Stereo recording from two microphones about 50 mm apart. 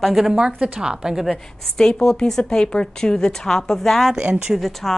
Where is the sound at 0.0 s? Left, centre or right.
Centre.